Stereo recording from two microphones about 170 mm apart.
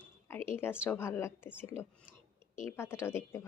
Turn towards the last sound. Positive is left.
turn(degrees=15)  # may be behind; listen again after turning